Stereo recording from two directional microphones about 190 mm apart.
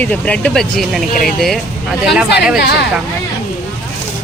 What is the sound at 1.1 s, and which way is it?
Speech, 50° left (ahead or behind).